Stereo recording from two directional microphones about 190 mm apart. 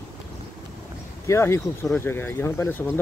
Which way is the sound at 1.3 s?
15° left (ahead or behind).